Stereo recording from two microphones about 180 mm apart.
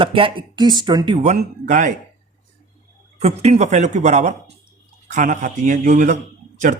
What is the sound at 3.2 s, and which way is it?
Speech, 35° right (ahead or behind).